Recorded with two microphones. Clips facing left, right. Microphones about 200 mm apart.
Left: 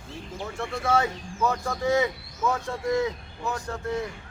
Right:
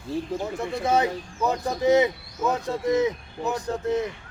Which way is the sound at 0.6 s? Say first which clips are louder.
Right 1 dB; 20° right (ahead or behind).